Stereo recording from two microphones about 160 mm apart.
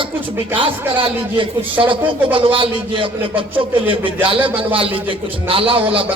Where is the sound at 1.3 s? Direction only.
30° right (ahead or behind).